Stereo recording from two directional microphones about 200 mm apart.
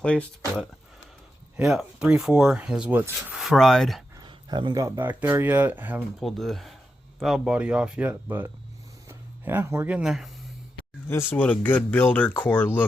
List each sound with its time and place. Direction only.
0.0 s speech: 5° left (ahead or behind)
4.1 s speech: 20° right (ahead or behind); by 10.2 s 5° right (ahead or behind)
11.1 s speech: 10° left (ahead or behind)